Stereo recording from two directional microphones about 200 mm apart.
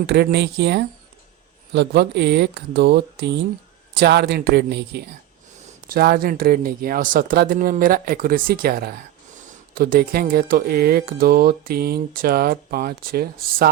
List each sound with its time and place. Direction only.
0.1 s speech: 55° right (ahead or behind)